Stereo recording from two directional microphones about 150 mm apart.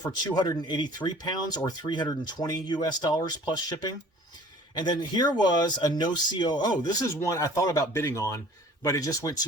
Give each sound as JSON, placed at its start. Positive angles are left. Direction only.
{"t": 0.0, "sound": "speech", "side_deg": 25}